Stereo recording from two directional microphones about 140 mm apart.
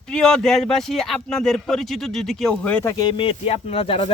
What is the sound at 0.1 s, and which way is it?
Speech, 5° left (ahead or behind).